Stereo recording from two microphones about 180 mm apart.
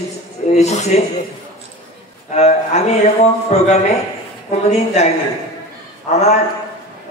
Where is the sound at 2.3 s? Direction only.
40° left (ahead or behind).